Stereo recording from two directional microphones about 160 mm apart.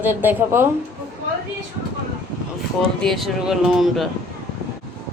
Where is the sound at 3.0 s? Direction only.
Centre (ahead or behind).